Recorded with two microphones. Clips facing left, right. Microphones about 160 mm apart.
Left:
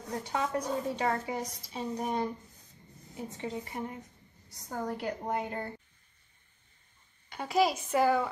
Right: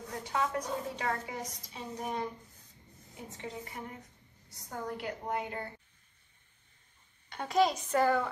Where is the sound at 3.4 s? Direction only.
25° left (ahead or behind).